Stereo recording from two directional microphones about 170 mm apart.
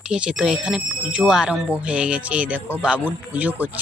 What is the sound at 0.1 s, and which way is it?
Speech, 5° right (ahead or behind).